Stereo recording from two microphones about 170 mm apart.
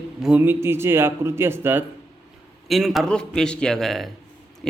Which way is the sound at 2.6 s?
Centre (ahead or behind).